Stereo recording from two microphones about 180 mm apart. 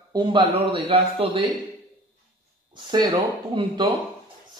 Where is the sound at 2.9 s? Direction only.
25° right (ahead or behind).